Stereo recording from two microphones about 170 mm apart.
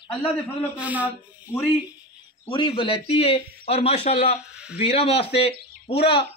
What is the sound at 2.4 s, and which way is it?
A man's voice, 30° left (ahead or behind).